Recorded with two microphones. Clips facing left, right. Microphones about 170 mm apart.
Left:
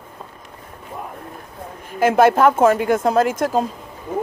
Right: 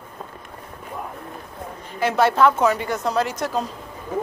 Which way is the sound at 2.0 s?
50° left (ahead or behind).